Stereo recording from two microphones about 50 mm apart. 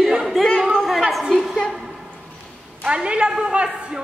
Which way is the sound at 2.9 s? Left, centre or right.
Centre.